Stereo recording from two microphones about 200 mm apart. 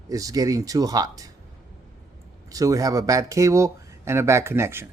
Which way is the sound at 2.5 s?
15° right (ahead or behind).